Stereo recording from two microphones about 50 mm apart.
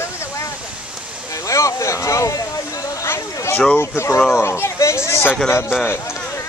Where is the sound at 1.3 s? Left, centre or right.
Left.